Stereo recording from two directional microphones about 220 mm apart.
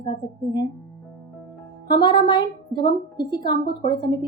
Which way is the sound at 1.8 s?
20° left (ahead or behind).